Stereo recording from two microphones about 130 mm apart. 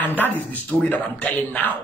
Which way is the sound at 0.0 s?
15° left (ahead or behind).